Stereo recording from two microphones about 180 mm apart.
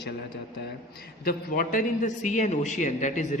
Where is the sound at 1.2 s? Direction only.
50° left (ahead or behind).